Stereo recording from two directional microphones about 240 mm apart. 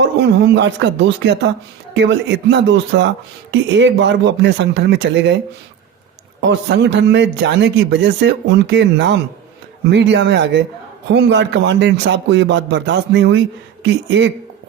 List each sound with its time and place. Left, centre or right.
0.0 s a man's voice: right
6.4 s a man's voice: right